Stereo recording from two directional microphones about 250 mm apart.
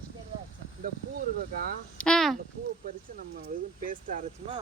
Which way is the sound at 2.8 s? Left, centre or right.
Right.